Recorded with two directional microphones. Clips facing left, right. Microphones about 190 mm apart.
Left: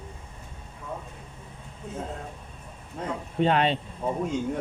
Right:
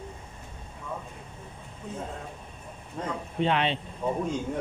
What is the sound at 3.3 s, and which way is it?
Speech, 40° left (ahead or behind).